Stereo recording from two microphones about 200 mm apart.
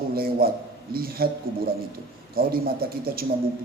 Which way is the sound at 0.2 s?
50° right (ahead or behind).